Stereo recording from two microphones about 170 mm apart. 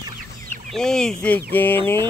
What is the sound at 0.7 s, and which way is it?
Speech, 5° left (ahead or behind).